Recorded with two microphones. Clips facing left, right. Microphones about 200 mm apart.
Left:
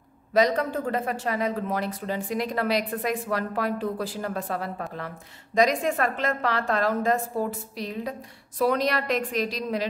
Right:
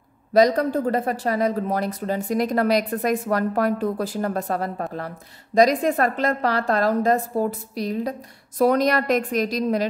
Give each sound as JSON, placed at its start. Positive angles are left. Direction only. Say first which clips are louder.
{"t": 0.3, "sound": "a woman's voice", "louder": "right 5 dB", "side_deg": -40}